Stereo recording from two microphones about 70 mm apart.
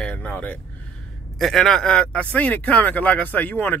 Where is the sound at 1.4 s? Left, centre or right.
Centre.